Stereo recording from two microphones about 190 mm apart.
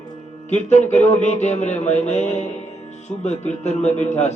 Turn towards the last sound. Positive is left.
turn(degrees=35)  # may be behind; listen again after turning